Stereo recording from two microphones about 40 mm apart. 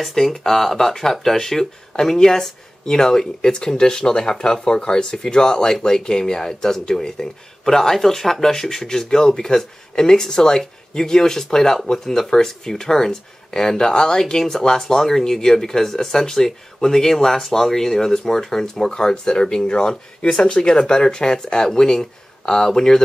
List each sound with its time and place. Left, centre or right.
0.0 s speech: centre